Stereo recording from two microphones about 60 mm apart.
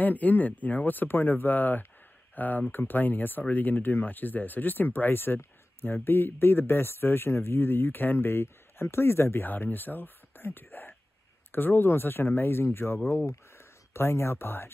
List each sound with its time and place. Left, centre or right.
0.0 s speech: left